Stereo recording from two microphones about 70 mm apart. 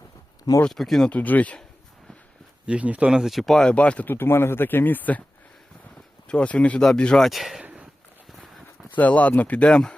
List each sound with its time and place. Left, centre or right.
0.7 s speech: centre
1.1 s speech: left
2.6 s speech: centre
3.8 s speech: centre
4.1 s speech: left
6.2 s speech: centre
7.3 s speech: centre
7.6 s a sound: right
9.0 s speech: left